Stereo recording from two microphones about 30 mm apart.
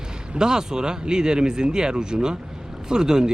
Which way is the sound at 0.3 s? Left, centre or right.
Right.